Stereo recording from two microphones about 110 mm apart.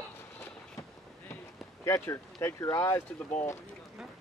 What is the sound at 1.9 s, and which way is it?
Speech, 25° left (ahead or behind).